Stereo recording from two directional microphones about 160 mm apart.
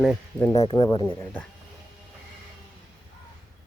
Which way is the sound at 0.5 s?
35° left (ahead or behind).